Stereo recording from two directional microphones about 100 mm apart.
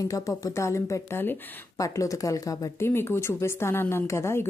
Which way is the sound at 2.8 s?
25° left (ahead or behind).